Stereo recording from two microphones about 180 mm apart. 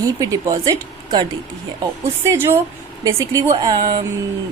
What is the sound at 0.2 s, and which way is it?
A woman's voice, 20° right (ahead or behind).